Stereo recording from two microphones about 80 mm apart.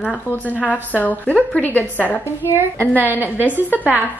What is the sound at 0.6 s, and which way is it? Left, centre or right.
A woman's voice, centre.